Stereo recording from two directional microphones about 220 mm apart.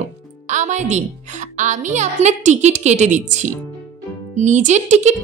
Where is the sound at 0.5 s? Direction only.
35° right (ahead or behind).